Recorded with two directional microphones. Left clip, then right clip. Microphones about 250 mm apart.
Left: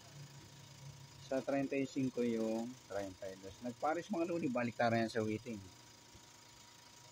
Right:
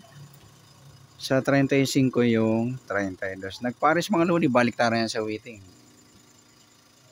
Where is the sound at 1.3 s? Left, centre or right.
Right.